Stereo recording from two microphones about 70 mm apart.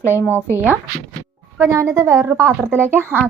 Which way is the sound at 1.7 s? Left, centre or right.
Right.